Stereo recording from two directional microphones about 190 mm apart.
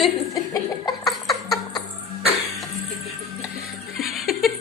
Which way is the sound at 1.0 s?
Centre (ahead or behind).